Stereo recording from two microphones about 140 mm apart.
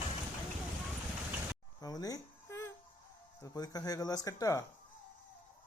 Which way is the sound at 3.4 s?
30° left (ahead or behind).